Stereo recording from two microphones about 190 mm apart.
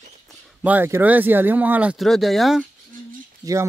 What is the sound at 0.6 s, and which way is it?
Speech, 10° right (ahead or behind).